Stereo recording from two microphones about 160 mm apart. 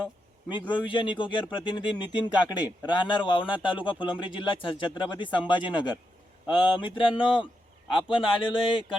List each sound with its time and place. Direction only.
0.9 s speech: 30° left (ahead or behind)